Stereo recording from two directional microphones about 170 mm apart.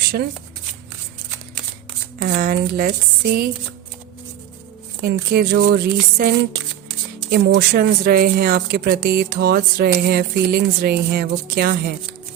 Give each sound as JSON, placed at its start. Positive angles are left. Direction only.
{"t": 0.0, "sound": "speech", "side_deg": -65}
{"t": 2.2, "sound": "speech", "side_deg": -60}
{"t": 5.0, "sound": "speech", "side_deg": -65}